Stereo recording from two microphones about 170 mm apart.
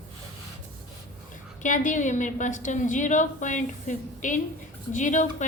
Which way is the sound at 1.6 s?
50° left (ahead or behind).